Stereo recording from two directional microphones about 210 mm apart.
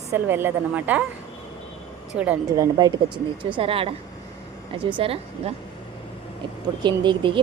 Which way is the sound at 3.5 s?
25° right (ahead or behind).